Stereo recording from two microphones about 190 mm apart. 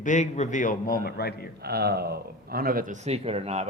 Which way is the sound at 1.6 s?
55° right (ahead or behind).